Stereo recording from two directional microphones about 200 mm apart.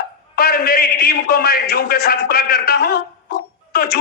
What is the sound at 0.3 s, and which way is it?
A man's voice, 50° left (ahead or behind).